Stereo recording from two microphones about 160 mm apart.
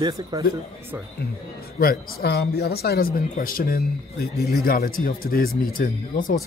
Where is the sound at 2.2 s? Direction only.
85° left; by 6.4 s 60° left (ahead or behind).